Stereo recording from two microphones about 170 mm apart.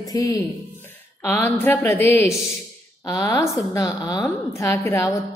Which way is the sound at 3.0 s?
20° left (ahead or behind).